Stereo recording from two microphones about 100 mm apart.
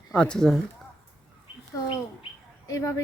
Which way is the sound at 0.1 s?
10° left (ahead or behind).